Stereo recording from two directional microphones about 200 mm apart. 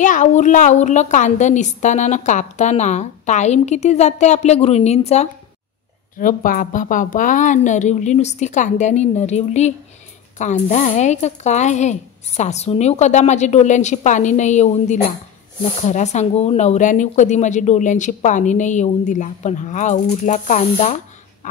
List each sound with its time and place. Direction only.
0.0 s speech: 40° left (ahead or behind)
6.1 s speech: 45° left (ahead or behind)